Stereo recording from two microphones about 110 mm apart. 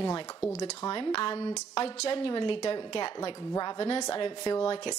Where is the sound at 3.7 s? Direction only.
60° left (ahead or behind).